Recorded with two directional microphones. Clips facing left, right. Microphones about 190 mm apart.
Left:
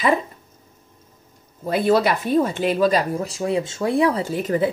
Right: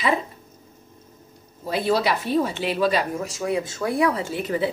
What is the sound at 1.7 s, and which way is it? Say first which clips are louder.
A woman's voice: left 4 dB; 55° left (ahead or behind).